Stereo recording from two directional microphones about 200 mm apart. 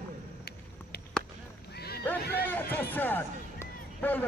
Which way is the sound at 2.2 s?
55° left (ahead or behind).